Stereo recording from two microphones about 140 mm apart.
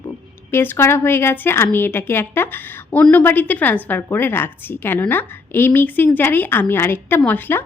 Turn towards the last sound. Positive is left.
turn(degrees=15)  # may be behind; listen again after turning